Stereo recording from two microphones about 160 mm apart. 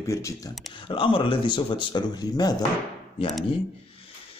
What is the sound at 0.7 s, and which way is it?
Speech, 30° left (ahead or behind).